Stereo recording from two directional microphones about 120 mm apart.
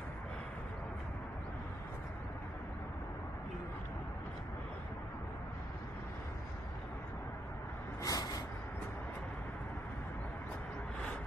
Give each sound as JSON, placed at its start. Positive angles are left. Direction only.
{"t": 8.0, "sound": "vehicle", "side_deg": 30}